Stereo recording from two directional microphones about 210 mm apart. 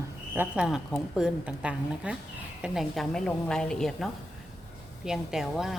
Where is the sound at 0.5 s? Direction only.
5° right (ahead or behind).